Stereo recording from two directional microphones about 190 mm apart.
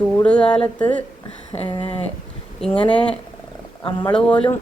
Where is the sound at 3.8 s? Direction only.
25° left (ahead or behind).